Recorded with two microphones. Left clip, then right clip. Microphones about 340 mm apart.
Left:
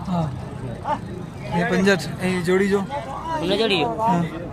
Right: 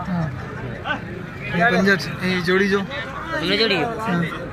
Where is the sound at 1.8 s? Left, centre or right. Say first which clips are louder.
Right 1 dB; left.